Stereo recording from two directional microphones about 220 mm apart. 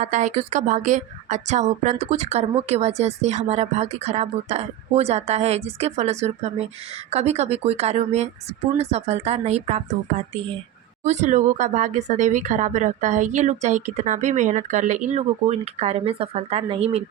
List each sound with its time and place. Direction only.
0.0 s a woman's voice: 35° right (ahead or behind)